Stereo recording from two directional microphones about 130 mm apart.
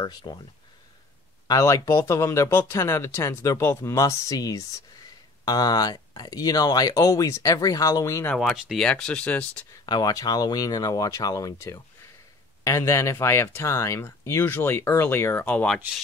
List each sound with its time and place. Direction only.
0.0 s speech: 35° left (ahead or behind)
1.5 s speech: 25° left (ahead or behind)
8.4 s speech: centre (ahead or behind)
9.8 s speech: 30° left (ahead or behind); by 15.8 s 10° left (ahead or behind)